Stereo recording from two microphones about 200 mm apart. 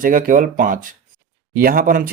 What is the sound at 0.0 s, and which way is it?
Speech, 45° right (ahead or behind).